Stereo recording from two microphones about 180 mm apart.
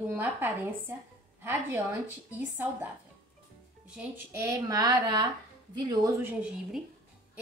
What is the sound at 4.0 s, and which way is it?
A woman's voice, 15° right (ahead or behind).